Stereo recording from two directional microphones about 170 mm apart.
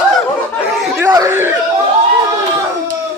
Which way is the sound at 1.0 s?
15° right (ahead or behind).